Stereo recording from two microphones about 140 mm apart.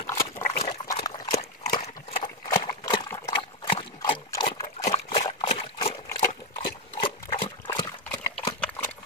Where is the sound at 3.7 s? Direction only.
35° left (ahead or behind).